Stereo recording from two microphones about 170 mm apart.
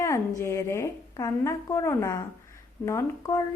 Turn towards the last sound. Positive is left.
turn(degrees=20)  # may be behind; listen again after turning